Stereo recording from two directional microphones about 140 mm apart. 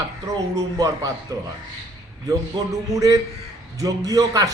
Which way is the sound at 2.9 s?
25° right (ahead or behind).